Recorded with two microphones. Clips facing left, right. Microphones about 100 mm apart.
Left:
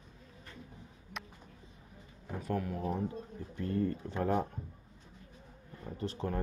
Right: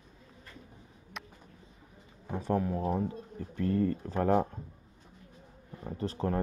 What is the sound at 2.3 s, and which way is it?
Speech, 30° right (ahead or behind).